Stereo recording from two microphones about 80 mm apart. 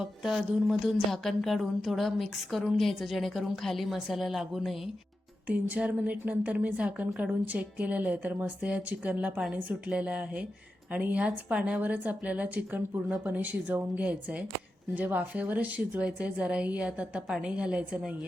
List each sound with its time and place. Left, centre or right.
0.0 s speech: centre
5.5 s a woman's voice: centre